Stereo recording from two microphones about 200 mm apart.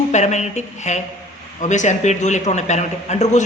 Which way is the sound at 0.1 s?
35° left (ahead or behind).